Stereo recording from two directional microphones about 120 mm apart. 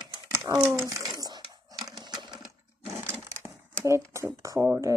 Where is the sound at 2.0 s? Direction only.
35° right (ahead or behind).